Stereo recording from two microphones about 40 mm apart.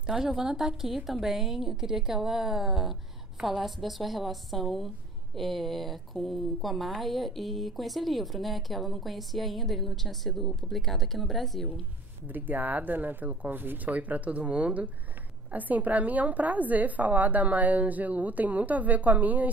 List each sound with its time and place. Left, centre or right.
0.2 s a woman's voice: centre
12.3 s speech: right
13.9 s a woman's voice: right